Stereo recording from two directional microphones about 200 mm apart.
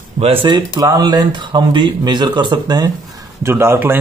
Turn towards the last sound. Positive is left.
turn(degrees=-10)  # may be behind; listen again after turning